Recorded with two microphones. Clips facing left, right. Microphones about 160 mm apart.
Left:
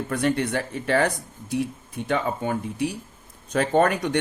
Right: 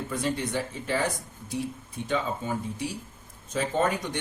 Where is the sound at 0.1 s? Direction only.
65° left (ahead or behind).